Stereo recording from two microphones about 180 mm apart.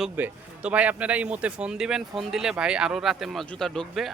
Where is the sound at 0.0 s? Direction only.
5° right (ahead or behind).